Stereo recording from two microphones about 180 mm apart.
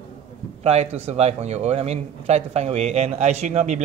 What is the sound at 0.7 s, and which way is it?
A man's voice, 35° right (ahead or behind).